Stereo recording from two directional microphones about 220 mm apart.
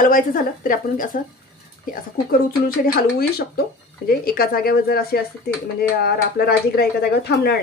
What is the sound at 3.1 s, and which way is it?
A woman's voice, 45° left (ahead or behind).